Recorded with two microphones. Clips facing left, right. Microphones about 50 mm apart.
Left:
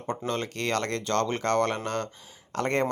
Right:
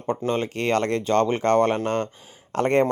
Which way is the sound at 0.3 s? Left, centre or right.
Right.